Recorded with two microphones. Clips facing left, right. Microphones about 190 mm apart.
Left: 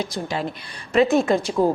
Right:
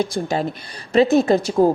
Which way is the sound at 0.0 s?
50° right (ahead or behind).